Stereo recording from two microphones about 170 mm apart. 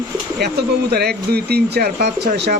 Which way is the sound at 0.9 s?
70° right (ahead or behind).